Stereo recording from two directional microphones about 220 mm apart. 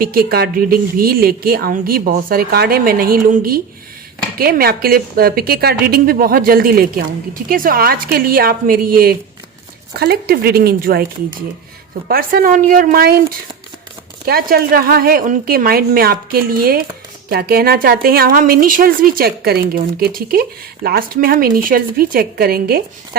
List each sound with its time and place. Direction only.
0.0 s a woman's voice: 40° right (ahead or behind)
12.0 s a woman's voice: 40° right (ahead or behind)
14.3 s a woman's voice: 45° right (ahead or behind)